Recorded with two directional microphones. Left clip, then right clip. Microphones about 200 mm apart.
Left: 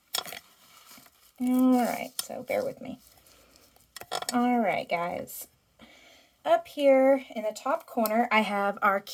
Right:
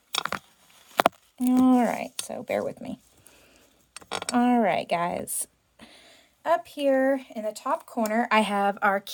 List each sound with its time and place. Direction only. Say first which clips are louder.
1.4 s speech: right 3 dB; 25° right (ahead or behind)
4.4 s speech: right 4 dB; 25° right (ahead or behind)
6.4 s speech: left 1 dB; 10° right (ahead or behind)